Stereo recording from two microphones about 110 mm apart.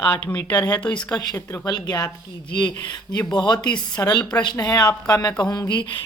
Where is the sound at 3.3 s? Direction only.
40° left (ahead or behind).